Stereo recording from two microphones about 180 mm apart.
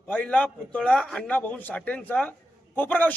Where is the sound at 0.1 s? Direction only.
10° left (ahead or behind).